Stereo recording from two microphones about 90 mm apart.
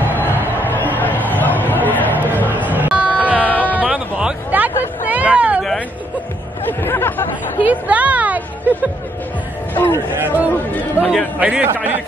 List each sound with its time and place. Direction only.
0.1 s music: 20° left (ahead or behind)
0.7 s a sound: 20° left (ahead or behind)
2.2 s chatter: 20° left (ahead or behind)
2.5 s music: 20° right (ahead or behind)
3.3 s music: 20° left (ahead or behind)
4.5 s hubbub: 20° right (ahead or behind)
6.8 s chatter: 25° left (ahead or behind)
7.6 s a sound: 15° right (ahead or behind)
9.8 s music: 25° left (ahead or behind)
10.1 s chatter: 20° right (ahead or behind)
10.7 s chatter: 20° left (ahead or behind)
11.3 s a man's voice: 15° right (ahead or behind)